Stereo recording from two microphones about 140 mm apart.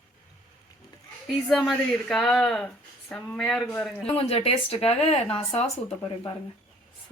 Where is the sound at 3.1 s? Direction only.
15° left (ahead or behind).